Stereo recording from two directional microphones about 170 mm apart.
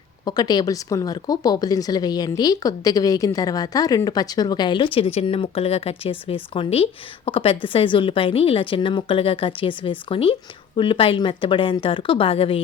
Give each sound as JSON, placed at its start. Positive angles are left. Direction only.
{"t": 0.3, "sound": "a woman's voice", "side_deg": 25}